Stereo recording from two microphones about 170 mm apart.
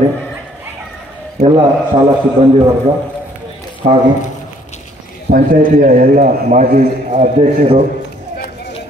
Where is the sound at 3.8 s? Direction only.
45° right (ahead or behind).